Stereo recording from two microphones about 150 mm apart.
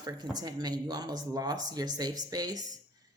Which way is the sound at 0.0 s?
25° right (ahead or behind).